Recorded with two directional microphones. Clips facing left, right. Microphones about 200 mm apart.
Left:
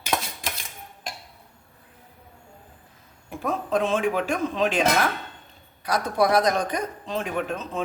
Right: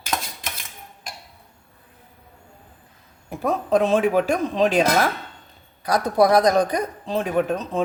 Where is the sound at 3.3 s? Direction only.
40° right (ahead or behind).